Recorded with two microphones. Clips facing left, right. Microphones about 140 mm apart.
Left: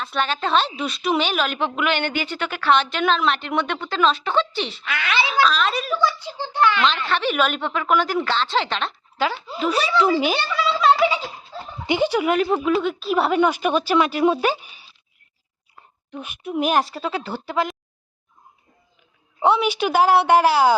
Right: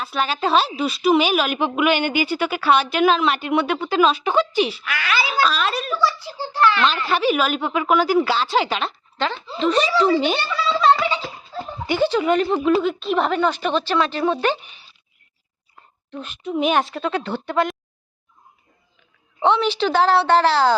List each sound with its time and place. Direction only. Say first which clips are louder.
0.0 s a woman's voice: right 2 dB; 5° right (ahead or behind)
4.9 s a child's voice: even; 25° left (ahead or behind)
5.3 s speech: left 2 dB; 5° right (ahead or behind)
6.0 s a child's voice: even; 20° left (ahead or behind)
6.8 s a woman's voice: right 2 dB; 5° right (ahead or behind)
9.1 s a woman's voice: left 1 dB; 10° left (ahead or behind)
16.1 s speech: right 1 dB; 10° left (ahead or behind)
19.4 s a woman's voice: even; 10° left (ahead or behind)